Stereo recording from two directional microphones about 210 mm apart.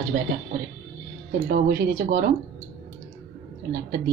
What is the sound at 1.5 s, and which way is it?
Speech, 45° right (ahead or behind).